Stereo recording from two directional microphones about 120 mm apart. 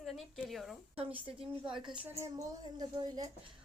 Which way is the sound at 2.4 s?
30° right (ahead or behind).